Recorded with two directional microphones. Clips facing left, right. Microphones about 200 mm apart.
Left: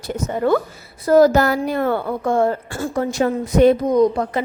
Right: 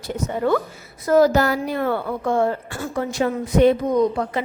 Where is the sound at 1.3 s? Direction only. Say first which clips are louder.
Left 2 dB; 50° left (ahead or behind).